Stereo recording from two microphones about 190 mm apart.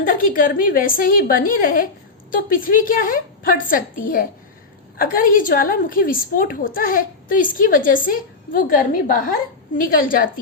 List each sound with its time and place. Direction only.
0.0 s a woman's voice: 45° left (ahead or behind)